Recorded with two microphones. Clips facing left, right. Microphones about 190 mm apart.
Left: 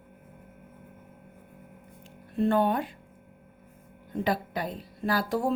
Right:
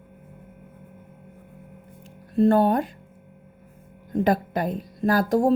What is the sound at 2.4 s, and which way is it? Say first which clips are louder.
Speech: right 6 dB; 40° right (ahead or behind).